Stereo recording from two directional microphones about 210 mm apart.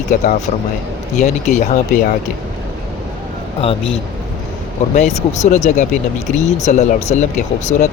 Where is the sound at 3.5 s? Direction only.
25° left (ahead or behind).